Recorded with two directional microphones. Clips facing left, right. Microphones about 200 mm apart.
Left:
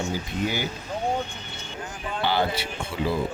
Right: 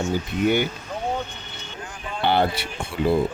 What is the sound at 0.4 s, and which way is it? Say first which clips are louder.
Speech: right 8 dB; 60° right (ahead or behind).